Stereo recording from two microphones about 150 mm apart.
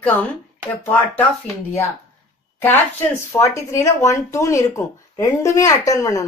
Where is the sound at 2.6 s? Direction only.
15° left (ahead or behind).